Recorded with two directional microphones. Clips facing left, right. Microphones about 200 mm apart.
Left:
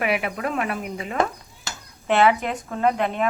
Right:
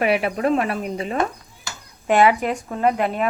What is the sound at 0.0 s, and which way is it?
Speech, 30° right (ahead or behind).